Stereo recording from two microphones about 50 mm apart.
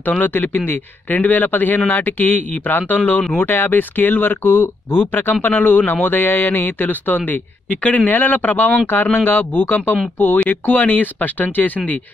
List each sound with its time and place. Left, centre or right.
0.0 s speech: left